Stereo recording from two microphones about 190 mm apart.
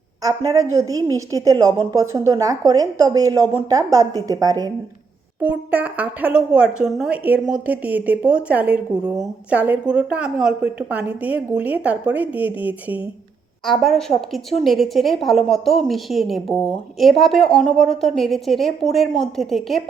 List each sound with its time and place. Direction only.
0.2 s a woman's voice: 20° right (ahead or behind)
5.4 s a woman's voice: 10° right (ahead or behind)